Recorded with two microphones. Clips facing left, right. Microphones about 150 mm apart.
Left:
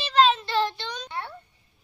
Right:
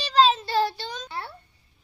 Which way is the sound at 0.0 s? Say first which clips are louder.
Even; 35° right (ahead or behind).